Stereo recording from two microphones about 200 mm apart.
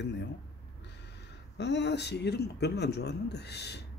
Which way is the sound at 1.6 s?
60° left (ahead or behind).